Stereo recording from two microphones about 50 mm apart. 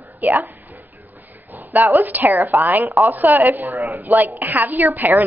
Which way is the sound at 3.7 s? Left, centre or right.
Right.